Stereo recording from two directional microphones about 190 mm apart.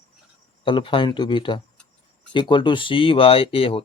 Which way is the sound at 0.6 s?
25° left (ahead or behind).